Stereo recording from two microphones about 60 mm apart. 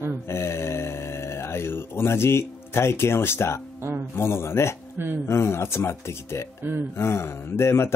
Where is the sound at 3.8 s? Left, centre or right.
Right.